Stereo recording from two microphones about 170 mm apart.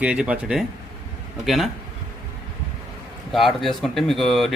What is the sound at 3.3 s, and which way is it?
A man's voice, centre (ahead or behind).